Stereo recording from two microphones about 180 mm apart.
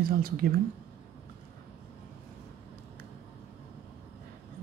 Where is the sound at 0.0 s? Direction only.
55° right (ahead or behind).